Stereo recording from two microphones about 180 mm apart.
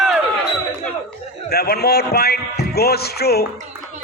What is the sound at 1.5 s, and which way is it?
Speech, 60° left (ahead or behind).